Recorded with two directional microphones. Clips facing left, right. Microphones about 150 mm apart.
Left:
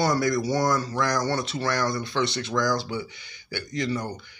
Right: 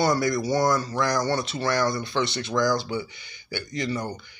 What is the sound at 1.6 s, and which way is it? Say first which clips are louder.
Speech: right 3 dB; 25° right (ahead or behind).